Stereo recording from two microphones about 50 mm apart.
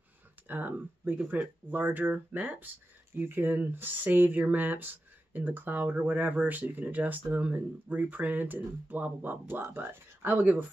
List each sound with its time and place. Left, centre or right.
0.5 s speech: right